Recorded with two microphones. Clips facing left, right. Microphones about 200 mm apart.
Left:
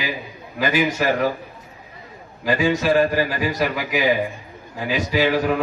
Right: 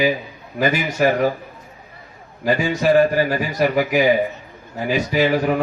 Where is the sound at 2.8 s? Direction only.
50° right (ahead or behind).